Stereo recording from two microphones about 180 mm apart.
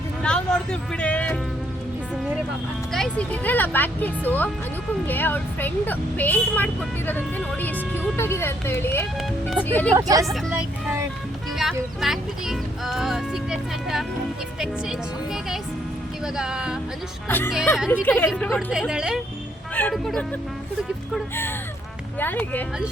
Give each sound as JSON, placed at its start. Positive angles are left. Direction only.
{"t": 0.2, "sound": "speech", "side_deg": 5}
{"t": 2.9, "sound": "speech", "side_deg": 5}
{"t": 9.9, "sound": "speech", "side_deg": -20}
{"t": 11.5, "sound": "speech", "side_deg": 0}
{"t": 17.2, "sound": "speech", "side_deg": 10}
{"t": 17.7, "sound": "speech", "side_deg": -5}
{"t": 18.0, "sound": "speech", "side_deg": 10}
{"t": 22.2, "sound": "speech", "side_deg": 10}